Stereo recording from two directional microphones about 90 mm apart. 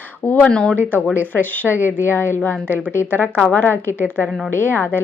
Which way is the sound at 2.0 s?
25° left (ahead or behind).